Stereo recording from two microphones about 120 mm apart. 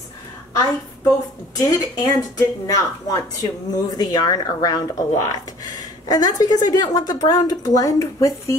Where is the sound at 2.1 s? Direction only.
30° left (ahead or behind).